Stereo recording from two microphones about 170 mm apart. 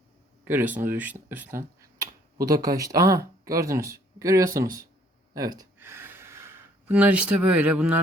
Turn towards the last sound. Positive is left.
turn(degrees=-5)  # may be behind; listen again after turning